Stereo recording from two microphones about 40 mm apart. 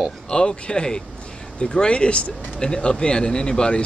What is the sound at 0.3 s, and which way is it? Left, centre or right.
Speech, left.